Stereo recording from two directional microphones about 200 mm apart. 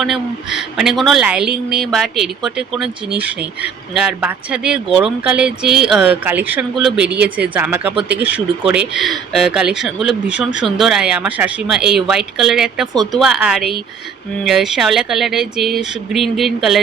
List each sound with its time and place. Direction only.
0.0 s speech: centre (ahead or behind)